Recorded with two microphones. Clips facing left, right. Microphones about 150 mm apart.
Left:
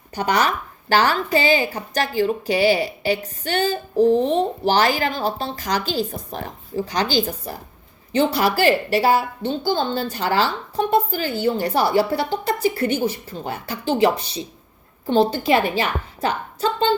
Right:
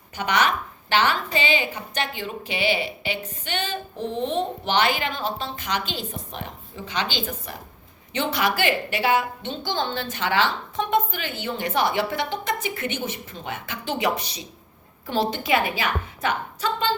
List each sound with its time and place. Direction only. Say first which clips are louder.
0.2 s a woman's voice: left 3 dB; 35° left (ahead or behind)